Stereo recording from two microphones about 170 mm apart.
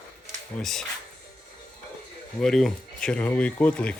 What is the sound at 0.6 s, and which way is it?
Speech, centre (ahead or behind).